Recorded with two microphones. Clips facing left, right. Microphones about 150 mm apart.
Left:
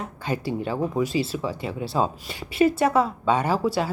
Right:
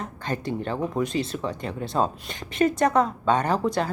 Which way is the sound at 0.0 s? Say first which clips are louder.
Left 1 dB; 10° left (ahead or behind).